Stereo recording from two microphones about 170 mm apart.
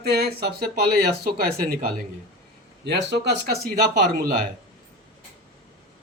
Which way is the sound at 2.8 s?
80° right.